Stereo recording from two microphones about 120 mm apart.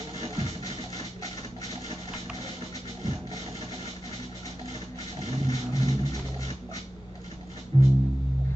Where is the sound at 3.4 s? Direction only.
60° right (ahead or behind).